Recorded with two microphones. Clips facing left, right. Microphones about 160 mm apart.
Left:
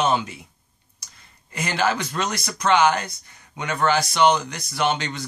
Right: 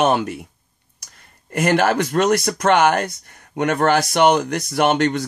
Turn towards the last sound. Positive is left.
turn(degrees=-55)  # may be behind; listen again after turning